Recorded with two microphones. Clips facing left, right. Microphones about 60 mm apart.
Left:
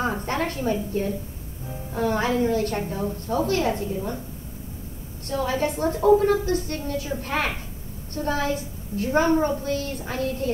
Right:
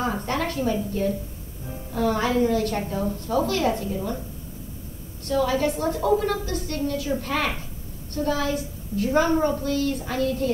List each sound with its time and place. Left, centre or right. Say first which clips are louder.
0.0 s a sound: even; left
1.9 s a woman's voice: even; left
5.2 s a woman's voice: right 2 dB; left